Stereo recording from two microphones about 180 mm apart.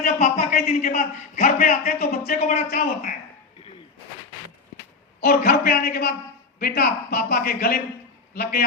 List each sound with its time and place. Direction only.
0.0 s a man's voice: 40° left (ahead or behind)
5.2 s a man's voice: 55° left (ahead or behind)